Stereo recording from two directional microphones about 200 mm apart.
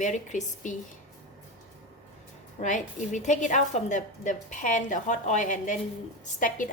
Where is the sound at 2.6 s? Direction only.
40° left (ahead or behind).